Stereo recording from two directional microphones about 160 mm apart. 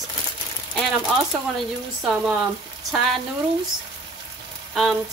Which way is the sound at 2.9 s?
Centre (ahead or behind).